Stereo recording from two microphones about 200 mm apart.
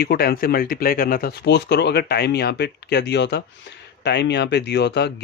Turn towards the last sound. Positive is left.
turn(degrees=55)  # may be behind; listen again after turning